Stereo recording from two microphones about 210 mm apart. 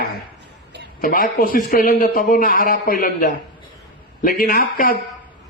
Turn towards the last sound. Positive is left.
turn(degrees=45)  # may be behind; listen again after turning